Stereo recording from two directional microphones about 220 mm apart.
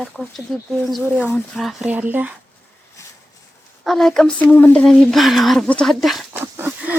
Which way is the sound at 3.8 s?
Centre (ahead or behind).